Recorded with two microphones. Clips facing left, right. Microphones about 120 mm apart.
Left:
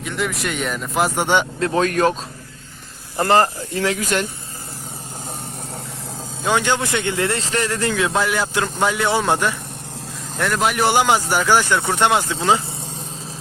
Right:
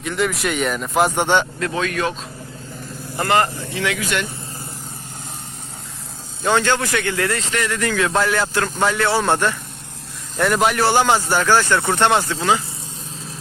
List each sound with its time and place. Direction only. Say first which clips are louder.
0.0 s speech: right 3 dB; centre (ahead or behind)
1.5 s speech: left 4 dB; 30° left (ahead or behind)
3.2 s speech: left 2 dB; 30° left (ahead or behind)
6.4 s speech: right 1 dB; 15° left (ahead or behind); by 7.9 s 30° left (ahead or behind)
8.1 s speech: right 1 dB; 10° left (ahead or behind)
10.3 s speech: right 3 dB; 5° right (ahead or behind)
10.8 s speech: even; 15° left (ahead or behind)
12.4 s speech: left 1 dB; 25° left (ahead or behind)